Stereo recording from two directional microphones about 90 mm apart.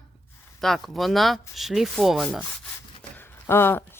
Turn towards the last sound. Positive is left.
turn(degrees=25)  # may be behind; listen again after turning